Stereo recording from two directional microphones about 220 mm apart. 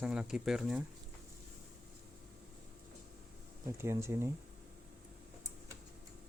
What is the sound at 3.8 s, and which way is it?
Speech, 10° right (ahead or behind).